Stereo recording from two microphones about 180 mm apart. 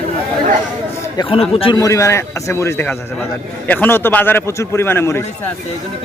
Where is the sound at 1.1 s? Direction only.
30° left (ahead or behind).